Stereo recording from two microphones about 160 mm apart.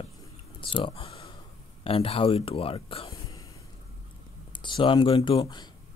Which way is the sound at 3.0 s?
20° left (ahead or behind).